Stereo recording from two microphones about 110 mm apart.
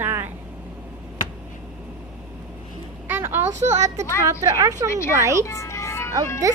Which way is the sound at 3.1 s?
20° right (ahead or behind).